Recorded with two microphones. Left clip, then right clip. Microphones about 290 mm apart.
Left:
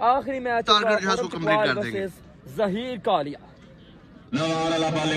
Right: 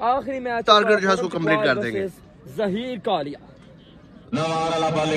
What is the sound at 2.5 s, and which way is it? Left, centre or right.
Speech, left.